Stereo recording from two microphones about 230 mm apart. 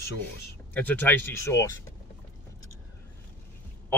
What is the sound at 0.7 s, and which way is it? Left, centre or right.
Speech, centre.